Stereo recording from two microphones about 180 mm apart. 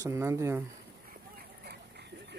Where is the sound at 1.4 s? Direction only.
65° right (ahead or behind).